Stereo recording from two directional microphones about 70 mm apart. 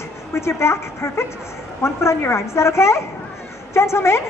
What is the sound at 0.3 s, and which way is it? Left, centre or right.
A woman's voice, left.